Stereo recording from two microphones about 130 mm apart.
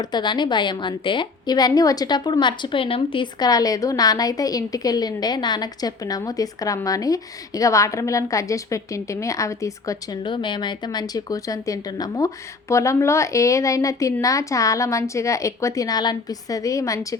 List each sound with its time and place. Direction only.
0.0 s a woman's voice: 35° left (ahead or behind)